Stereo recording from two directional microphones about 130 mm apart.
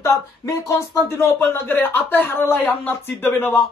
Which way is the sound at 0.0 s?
25° left (ahead or behind).